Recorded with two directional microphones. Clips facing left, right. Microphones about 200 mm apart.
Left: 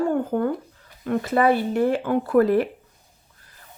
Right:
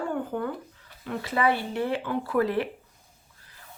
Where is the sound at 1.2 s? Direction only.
45° left (ahead or behind).